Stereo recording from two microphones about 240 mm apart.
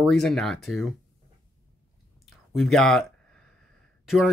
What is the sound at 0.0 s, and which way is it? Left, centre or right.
Speech, centre.